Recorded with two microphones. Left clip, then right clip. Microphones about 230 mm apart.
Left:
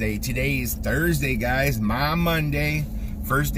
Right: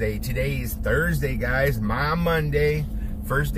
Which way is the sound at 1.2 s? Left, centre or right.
Centre.